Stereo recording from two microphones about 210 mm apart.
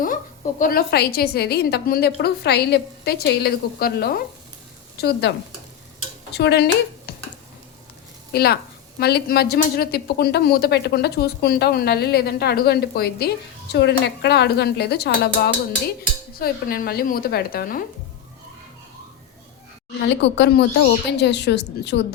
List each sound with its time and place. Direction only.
0.6 s speech: 45° left (ahead or behind)
6.3 s speech: 50° left (ahead or behind)
8.3 s speech: 50° left (ahead or behind)
20.2 s speech: 55° left (ahead or behind)